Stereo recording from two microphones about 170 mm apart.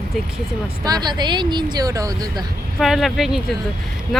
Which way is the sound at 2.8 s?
Centre (ahead or behind).